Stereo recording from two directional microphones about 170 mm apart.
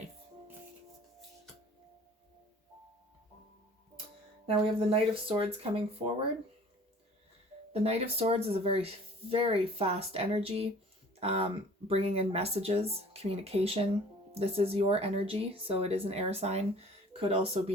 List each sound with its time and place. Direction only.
4.4 s speech: 35° right (ahead or behind)
7.7 s speech: 35° right (ahead or behind)